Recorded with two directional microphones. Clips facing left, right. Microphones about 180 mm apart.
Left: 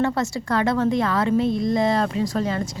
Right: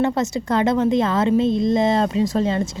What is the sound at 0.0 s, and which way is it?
A woman's voice, 20° right (ahead or behind).